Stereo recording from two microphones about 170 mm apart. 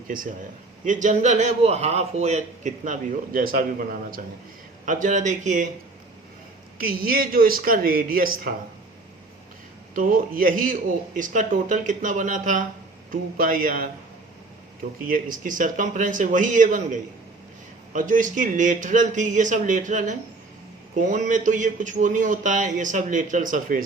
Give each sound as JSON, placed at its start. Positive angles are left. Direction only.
{"t": 0.1, "sound": "a man's voice", "side_deg": -55}
{"t": 6.7, "sound": "speech", "side_deg": -60}
{"t": 9.9, "sound": "a man's voice", "side_deg": -55}
{"t": 15.0, "sound": "a man's voice", "side_deg": -55}